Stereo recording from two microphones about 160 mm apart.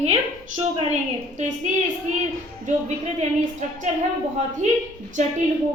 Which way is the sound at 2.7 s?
45° right (ahead or behind).